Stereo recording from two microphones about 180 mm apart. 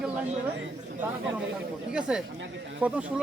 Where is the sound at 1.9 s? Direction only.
5° right (ahead or behind).